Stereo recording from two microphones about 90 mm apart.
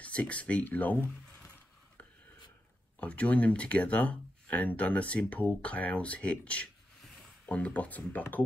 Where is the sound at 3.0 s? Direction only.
15° left (ahead or behind).